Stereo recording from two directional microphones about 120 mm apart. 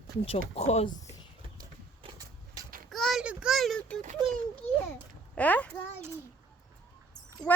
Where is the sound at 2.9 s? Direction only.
Centre (ahead or behind).